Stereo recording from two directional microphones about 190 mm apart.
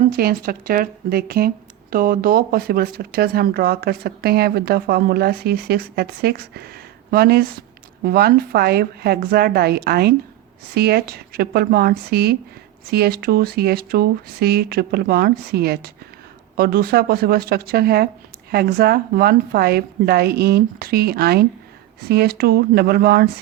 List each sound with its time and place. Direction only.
0.2 s speech: 50° right (ahead or behind)